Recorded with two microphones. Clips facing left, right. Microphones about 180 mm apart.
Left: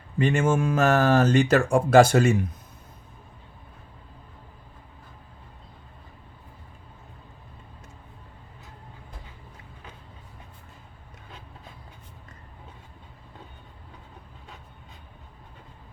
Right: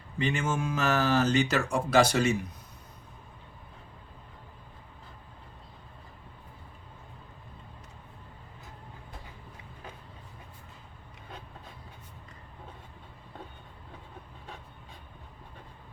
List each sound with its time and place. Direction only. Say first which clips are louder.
0.2 s speech: left 7 dB; 50° left (ahead or behind)